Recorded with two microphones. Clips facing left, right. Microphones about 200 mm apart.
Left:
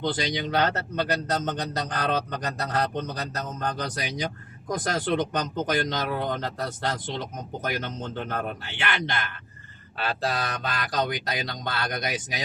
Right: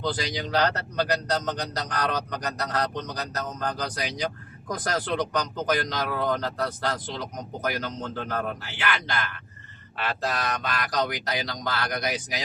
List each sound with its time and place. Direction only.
0.0 s speech: 25° left (ahead or behind)